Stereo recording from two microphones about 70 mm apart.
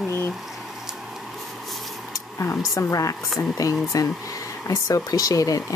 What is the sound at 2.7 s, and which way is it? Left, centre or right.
Speech, left.